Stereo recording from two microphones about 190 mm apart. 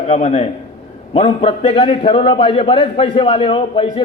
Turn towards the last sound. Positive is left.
turn(degrees=25)  # may be behind; listen again after turning